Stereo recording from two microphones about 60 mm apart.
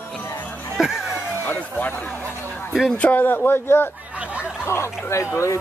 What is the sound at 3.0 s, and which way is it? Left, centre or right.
Speech, left.